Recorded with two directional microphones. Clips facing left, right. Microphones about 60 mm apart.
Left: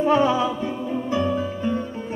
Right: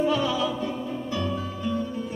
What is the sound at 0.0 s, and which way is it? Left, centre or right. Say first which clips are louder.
Music: left 5 dB; left.